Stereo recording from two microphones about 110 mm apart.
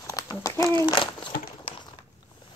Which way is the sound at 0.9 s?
45° left (ahead or behind).